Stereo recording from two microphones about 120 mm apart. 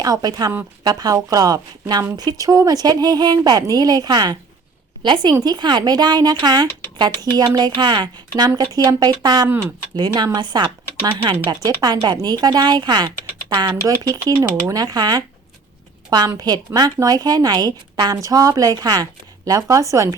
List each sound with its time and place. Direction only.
0.0 s a woman's voice: 30° right (ahead or behind)